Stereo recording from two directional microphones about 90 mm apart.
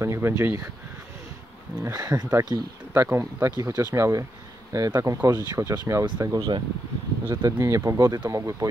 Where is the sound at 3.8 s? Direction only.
30° right (ahead or behind).